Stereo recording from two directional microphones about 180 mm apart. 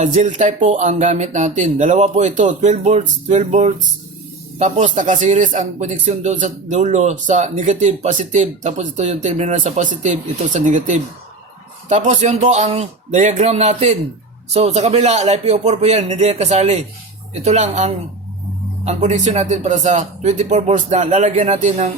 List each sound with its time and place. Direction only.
0.0 s speech: 40° right (ahead or behind)